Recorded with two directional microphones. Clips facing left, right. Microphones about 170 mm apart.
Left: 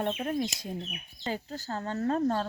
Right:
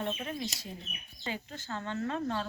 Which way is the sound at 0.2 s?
45° left (ahead or behind).